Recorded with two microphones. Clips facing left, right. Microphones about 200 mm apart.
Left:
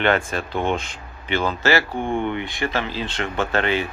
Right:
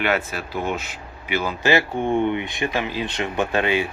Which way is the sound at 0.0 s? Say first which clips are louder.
Left 3 dB; 5° right (ahead or behind).